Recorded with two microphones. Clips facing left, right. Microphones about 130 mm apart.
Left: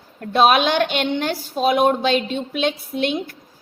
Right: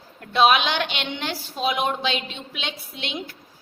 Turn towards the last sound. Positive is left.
turn(degrees=45)  # may be behind; listen again after turning